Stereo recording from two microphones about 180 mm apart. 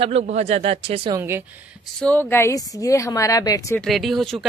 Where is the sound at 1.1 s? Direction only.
15° right (ahead or behind).